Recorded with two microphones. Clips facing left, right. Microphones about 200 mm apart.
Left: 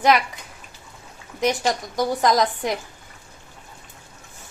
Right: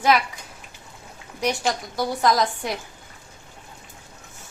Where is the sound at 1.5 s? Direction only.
20° left (ahead or behind).